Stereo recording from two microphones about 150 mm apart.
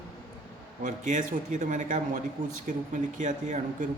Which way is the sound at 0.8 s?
60° right (ahead or behind).